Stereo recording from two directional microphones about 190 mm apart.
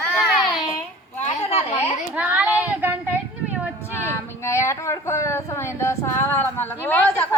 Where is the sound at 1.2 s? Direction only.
35° left (ahead or behind).